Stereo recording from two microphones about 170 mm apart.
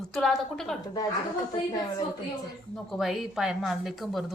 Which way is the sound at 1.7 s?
20° left (ahead or behind).